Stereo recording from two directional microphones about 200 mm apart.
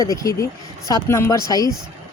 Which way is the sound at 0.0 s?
15° left (ahead or behind).